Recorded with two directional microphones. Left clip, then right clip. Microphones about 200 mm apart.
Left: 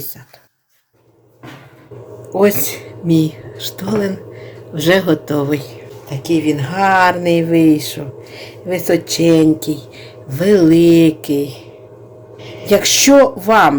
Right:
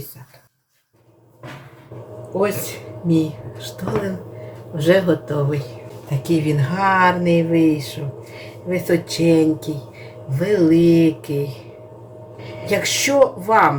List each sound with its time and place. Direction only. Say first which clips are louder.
2.4 s a man's voice: left 7 dB; 60° left (ahead or behind)
12.6 s speech: left 8 dB; 45° left (ahead or behind)